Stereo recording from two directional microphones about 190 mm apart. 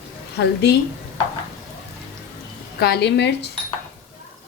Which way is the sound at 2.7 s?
60° left (ahead or behind).